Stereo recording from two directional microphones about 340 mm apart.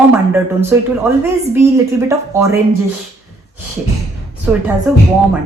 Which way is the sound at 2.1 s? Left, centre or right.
Centre.